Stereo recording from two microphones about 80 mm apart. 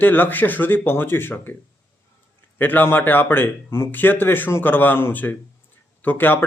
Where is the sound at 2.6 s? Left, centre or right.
Left.